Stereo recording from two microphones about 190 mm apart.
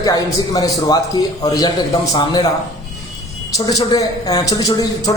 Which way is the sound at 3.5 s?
20° left (ahead or behind).